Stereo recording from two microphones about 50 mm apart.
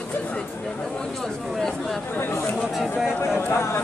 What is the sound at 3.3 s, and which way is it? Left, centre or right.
Speech, left.